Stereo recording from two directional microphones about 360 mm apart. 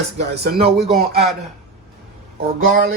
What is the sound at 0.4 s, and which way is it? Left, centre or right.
Speech, right.